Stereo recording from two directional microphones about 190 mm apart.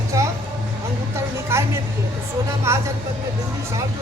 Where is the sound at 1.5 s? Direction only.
15° right (ahead or behind).